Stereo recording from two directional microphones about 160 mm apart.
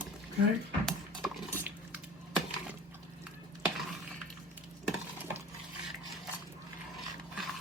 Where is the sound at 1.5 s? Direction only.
10° right (ahead or behind).